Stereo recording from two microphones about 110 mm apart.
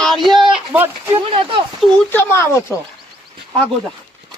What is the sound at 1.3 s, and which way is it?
Speech, 55° right (ahead or behind).